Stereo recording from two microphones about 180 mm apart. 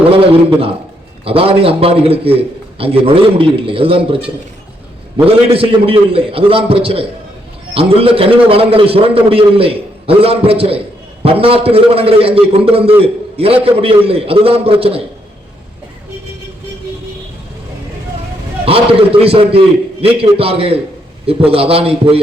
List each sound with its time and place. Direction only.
1.2 s a man's voice: 30° right (ahead or behind)
18.6 s a man's voice: 30° right (ahead or behind)